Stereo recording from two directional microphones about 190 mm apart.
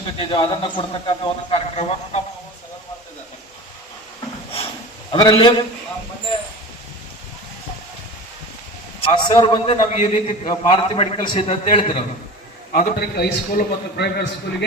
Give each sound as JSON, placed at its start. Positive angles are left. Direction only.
{"t": 0.2, "sound": "speech", "side_deg": 25}
{"t": 5.1, "sound": "speech", "side_deg": 25}
{"t": 9.0, "sound": "speech", "side_deg": 25}
{"t": 12.7, "sound": "a man's voice", "side_deg": 50}